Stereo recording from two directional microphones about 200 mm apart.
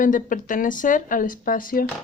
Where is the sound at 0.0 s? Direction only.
40° left (ahead or behind).